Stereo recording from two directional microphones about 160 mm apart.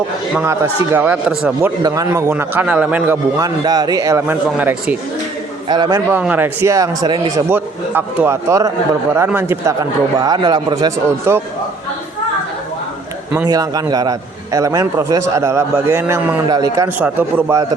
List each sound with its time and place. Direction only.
0.3 s a man's voice: 15° right (ahead or behind)
1.8 s a man's voice: 20° right (ahead or behind)
3.3 s a man's voice: 25° right (ahead or behind)
5.6 s a man's voice: 25° right (ahead or behind)
6.1 s a man's voice: 10° right (ahead or behind)
13.5 s a man's voice: 25° right (ahead or behind)